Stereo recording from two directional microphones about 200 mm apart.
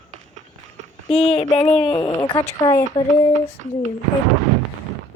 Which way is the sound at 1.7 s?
25° left (ahead or behind).